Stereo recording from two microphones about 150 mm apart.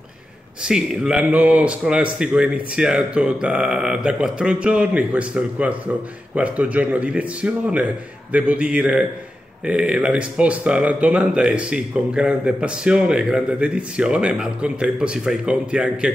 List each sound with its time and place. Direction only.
0.7 s speech: 5° right (ahead or behind)